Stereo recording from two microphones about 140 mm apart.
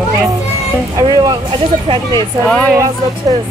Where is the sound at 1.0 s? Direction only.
30° right (ahead or behind).